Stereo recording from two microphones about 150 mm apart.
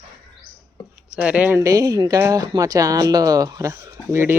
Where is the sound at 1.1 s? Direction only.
10° right (ahead or behind).